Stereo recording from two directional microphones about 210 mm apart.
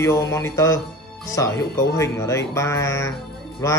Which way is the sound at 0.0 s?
15° left (ahead or behind).